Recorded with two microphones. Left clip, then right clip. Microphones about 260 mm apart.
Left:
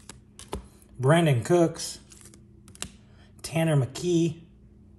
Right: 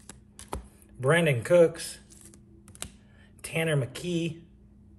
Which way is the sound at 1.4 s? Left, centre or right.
Centre.